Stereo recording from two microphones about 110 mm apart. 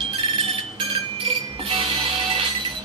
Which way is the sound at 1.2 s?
55° right (ahead or behind).